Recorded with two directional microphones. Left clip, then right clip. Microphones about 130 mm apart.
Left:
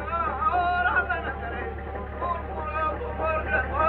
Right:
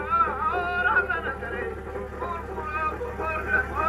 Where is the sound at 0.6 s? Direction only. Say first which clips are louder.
Right 1 dB; 30° left (ahead or behind).